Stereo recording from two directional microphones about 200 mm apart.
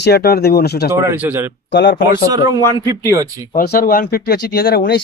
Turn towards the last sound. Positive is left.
turn(degrees=50)  # may be behind; listen again after turning